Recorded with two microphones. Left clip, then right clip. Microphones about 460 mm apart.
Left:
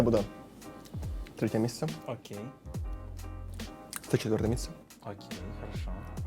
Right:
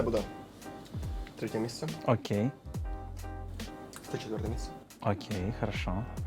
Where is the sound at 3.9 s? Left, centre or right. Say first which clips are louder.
Left 8 dB; left.